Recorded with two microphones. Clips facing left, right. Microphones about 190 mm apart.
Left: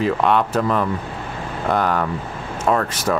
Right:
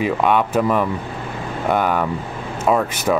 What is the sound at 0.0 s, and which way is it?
Speech, 5° right (ahead or behind).